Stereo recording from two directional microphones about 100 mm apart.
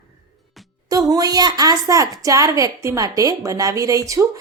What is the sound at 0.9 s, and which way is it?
A woman's voice, 40° right (ahead or behind).